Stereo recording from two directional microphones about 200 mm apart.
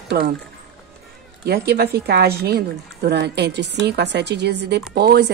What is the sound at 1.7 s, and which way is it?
Speech, 50° right (ahead or behind).